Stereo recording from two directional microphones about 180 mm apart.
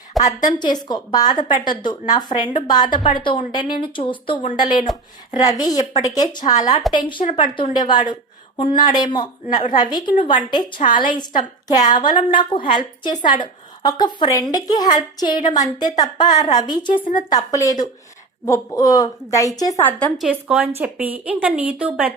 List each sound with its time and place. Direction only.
0.2 s a woman's voice: 20° left (ahead or behind)
20.0 s a woman's voice: 10° left (ahead or behind)
20.2 s a woman's voice: 5° right (ahead or behind)